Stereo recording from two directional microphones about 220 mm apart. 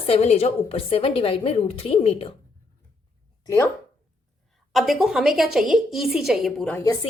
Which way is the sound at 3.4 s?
15° left (ahead or behind).